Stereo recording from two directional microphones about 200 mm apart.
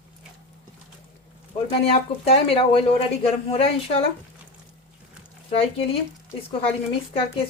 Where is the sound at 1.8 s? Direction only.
30° left (ahead or behind).